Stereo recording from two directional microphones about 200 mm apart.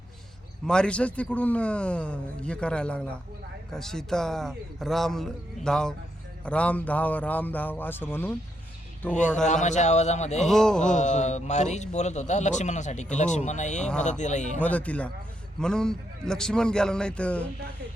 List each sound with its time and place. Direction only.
0.6 s a man's voice: 5° left (ahead or behind)
9.1 s a man's voice: 35° left (ahead or behind)
10.4 s a man's voice: centre (ahead or behind)
10.9 s a man's voice: 35° left (ahead or behind)
14.6 s a man's voice: 5° left (ahead or behind)